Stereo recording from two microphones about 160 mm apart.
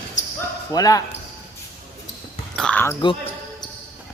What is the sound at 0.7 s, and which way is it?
Speech, 20° left (ahead or behind).